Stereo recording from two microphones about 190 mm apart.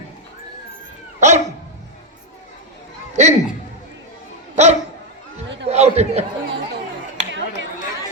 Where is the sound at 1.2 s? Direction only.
40° right (ahead or behind).